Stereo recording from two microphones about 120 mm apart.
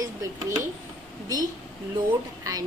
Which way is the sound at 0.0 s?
30° right (ahead or behind).